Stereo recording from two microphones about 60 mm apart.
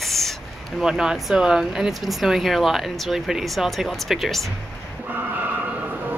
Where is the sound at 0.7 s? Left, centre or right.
Centre.